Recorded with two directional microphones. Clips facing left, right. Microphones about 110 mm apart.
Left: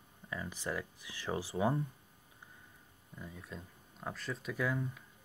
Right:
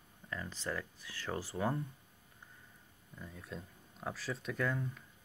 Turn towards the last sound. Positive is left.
turn(degrees=5)  # may be behind; listen again after turning